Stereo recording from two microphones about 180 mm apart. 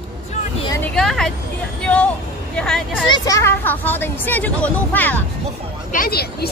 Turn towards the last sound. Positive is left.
turn(degrees=60)  # may be behind; listen again after turning